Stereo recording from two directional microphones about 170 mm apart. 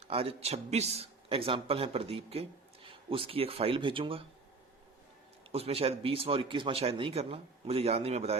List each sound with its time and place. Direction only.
0.1 s speech: 35° right (ahead or behind)
5.5 s speech: 35° right (ahead or behind)